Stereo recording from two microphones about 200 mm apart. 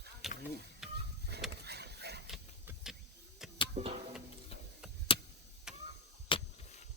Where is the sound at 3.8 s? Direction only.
30° right (ahead or behind).